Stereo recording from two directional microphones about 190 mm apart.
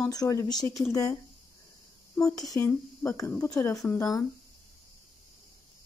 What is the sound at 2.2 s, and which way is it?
Speech, 15° left (ahead or behind).